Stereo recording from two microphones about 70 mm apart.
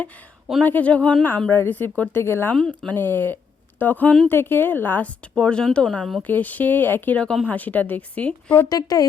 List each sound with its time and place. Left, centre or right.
0.6 s speech: left
5.3 s speech: centre
6.2 s speech: left
8.7 s speech: left